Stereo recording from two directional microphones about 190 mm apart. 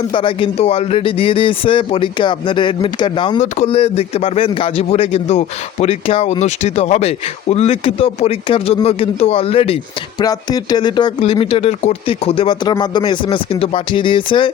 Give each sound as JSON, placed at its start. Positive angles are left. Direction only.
{"t": 0.1, "sound": "speech", "side_deg": 25}